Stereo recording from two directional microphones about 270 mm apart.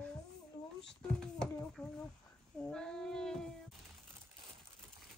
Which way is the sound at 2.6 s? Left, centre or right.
Centre.